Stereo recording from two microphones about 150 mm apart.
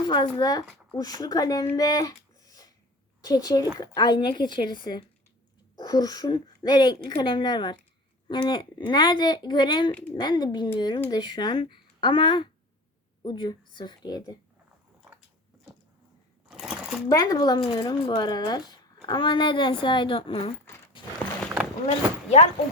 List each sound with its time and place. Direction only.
0.0 s a woman's voice: 30° left (ahead or behind)
1.7 s a sound: 25° left (ahead or behind)
3.2 s a woman's voice: 25° left (ahead or behind)
16.5 s a sound: 5° right (ahead or behind)
17.1 s a woman's voice: 25° left (ahead or behind)
21.8 s speech: 45° left (ahead or behind)